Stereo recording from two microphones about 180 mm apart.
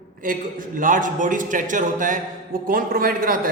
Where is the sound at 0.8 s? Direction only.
50° right (ahead or behind).